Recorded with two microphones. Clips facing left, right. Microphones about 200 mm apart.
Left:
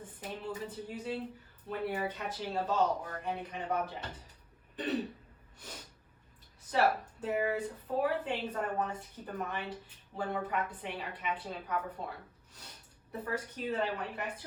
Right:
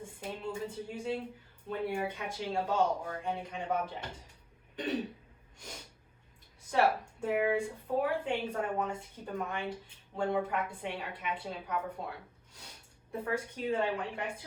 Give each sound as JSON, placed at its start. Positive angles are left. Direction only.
{"t": 0.0, "sound": "speech", "side_deg": -10}
{"t": 5.5, "sound": "snort", "side_deg": -10}
{"t": 6.6, "sound": "speech", "side_deg": -10}
{"t": 10.2, "sound": "a woman's voice", "side_deg": -25}
{"t": 10.4, "sound": "speech", "side_deg": -10}